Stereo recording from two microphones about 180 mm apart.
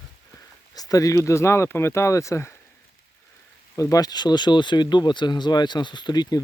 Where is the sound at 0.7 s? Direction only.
20° left (ahead or behind).